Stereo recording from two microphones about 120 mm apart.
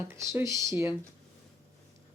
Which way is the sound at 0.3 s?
25° right (ahead or behind).